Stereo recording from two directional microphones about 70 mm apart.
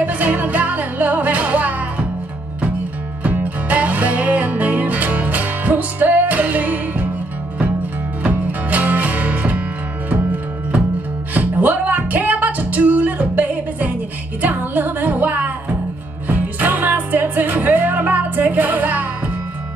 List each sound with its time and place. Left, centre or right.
0.0 s music: right
3.3 s music: right
8.2 s music: right